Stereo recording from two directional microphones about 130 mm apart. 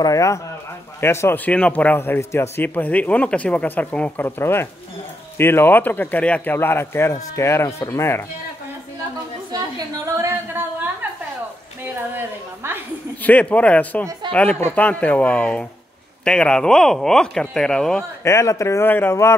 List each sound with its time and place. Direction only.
0.0 s a man's voice: 25° left (ahead or behind)
10.0 s a sound: 20° right (ahead or behind)
11.8 s a woman's voice: 15° right (ahead or behind)
13.2 s a man's voice: 10° left (ahead or behind)
18.2 s speech: 20° left (ahead or behind)